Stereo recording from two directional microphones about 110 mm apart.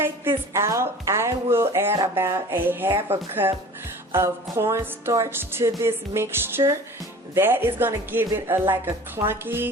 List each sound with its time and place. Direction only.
0.0 s speech: 20° right (ahead or behind)